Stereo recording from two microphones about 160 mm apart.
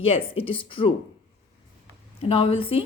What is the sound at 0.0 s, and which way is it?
Speech, 35° left (ahead or behind).